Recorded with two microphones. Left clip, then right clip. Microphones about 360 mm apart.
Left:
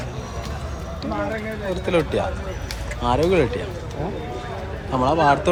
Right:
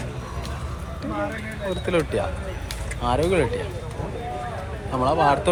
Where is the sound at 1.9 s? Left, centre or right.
Centre.